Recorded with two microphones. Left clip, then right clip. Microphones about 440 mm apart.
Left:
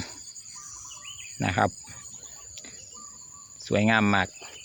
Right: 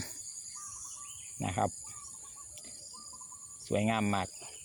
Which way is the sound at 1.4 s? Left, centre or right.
Right.